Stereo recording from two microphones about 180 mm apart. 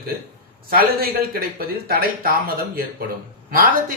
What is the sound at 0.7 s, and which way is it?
Speech, 55° right (ahead or behind).